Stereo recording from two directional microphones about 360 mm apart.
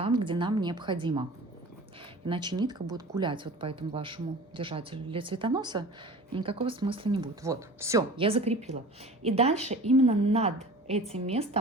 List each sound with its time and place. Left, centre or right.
0.0 s a woman's voice: centre
2.2 s speech: centre